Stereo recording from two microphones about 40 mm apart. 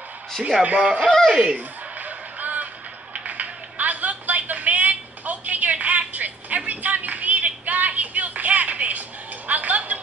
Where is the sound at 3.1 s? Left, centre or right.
Right.